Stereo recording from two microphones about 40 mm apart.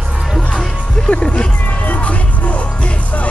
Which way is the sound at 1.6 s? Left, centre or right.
Left.